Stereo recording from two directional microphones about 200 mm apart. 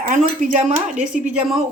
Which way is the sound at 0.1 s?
40° right (ahead or behind).